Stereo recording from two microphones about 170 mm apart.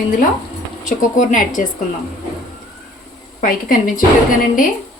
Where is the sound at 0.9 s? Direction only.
45° left (ahead or behind).